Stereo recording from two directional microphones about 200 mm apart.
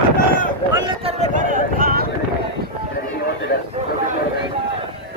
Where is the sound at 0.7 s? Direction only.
20° right (ahead or behind).